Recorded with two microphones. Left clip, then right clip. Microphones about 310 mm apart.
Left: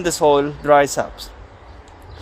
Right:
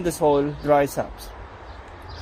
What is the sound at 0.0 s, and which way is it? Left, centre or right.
Speech, left.